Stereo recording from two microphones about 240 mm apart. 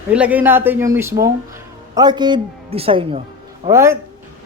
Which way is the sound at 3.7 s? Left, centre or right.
Centre.